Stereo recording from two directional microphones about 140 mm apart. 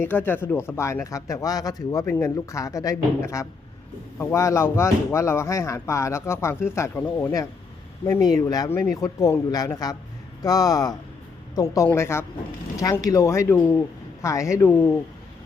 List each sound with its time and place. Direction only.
0.0 s speech: 15° left (ahead or behind)
8.3 s speech: 25° left (ahead or behind)